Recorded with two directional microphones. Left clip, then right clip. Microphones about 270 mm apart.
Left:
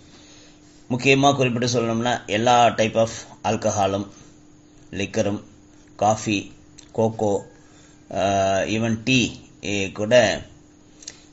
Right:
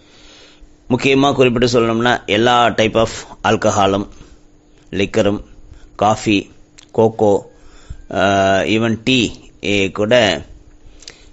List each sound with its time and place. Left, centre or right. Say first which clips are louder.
0.4 s a man's voice: right 4 dB; right